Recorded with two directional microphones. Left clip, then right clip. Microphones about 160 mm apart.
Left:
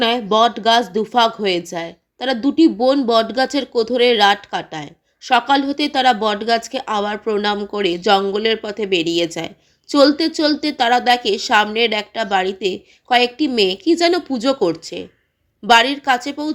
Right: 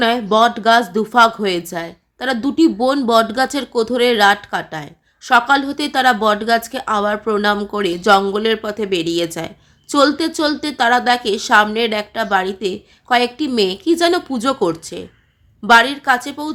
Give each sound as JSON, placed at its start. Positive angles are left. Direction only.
{"t": 0.0, "sound": "a woman's voice", "side_deg": 5}